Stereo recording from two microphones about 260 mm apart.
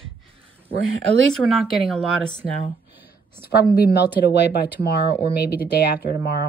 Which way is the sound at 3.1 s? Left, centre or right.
Left.